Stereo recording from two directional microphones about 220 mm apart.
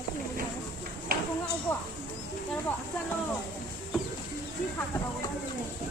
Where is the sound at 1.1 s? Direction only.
40° right (ahead or behind).